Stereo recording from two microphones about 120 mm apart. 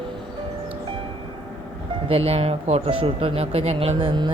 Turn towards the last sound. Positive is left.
turn(degrees=-45)  # may be behind; listen again after turning